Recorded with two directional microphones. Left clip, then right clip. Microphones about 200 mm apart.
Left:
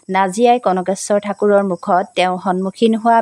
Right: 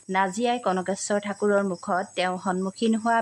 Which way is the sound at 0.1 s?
40° left (ahead or behind).